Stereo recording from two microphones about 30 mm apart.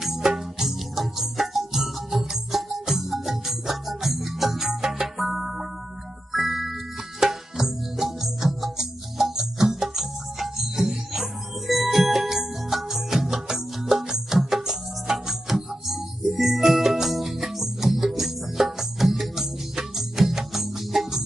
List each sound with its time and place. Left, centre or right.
0.2 s music: centre